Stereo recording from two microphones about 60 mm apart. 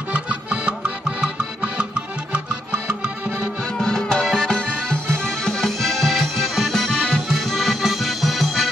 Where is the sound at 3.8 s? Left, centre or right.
Centre.